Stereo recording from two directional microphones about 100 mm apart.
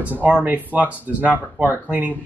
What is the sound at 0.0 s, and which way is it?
Speech, 15° right (ahead or behind).